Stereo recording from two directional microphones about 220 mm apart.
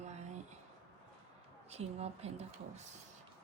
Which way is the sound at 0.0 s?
30° right (ahead or behind).